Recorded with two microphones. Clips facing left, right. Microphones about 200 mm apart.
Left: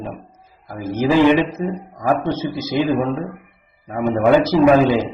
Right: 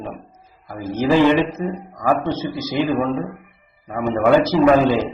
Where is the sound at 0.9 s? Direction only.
15° left (ahead or behind).